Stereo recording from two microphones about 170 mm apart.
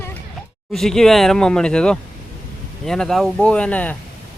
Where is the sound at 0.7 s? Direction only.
Centre (ahead or behind).